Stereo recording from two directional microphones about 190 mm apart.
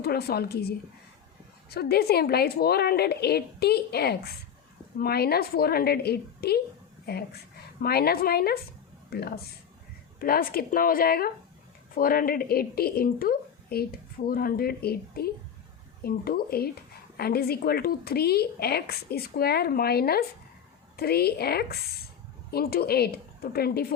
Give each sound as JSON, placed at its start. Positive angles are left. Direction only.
{"t": 0.0, "sound": "a woman's voice", "side_deg": 55}
{"t": 1.7, "sound": "a woman's voice", "side_deg": 55}